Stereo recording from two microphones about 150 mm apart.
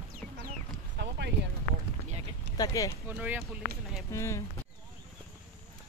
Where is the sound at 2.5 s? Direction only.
25° left (ahead or behind).